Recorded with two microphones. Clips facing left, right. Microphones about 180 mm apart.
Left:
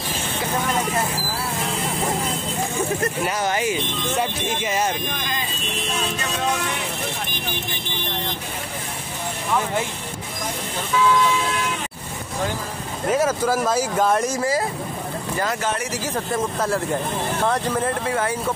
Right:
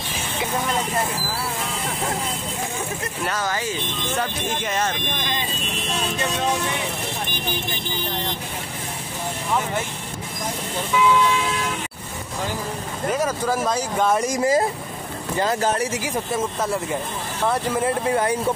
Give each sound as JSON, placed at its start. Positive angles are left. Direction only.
{"t": 3.3, "sound": "speech", "side_deg": 20}
{"t": 4.2, "sound": "speech", "side_deg": 5}
{"t": 13.1, "sound": "speech", "side_deg": 5}
{"t": 14.2, "sound": "speech", "side_deg": -15}
{"t": 16.6, "sound": "speech", "side_deg": 0}
{"t": 17.5, "sound": "speech", "side_deg": -15}